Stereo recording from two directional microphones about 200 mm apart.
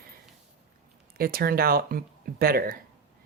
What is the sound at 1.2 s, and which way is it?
Speech, 50° right (ahead or behind).